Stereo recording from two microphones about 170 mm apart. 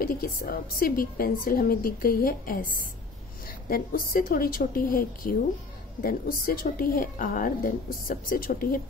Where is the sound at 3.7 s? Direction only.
55° left (ahead or behind).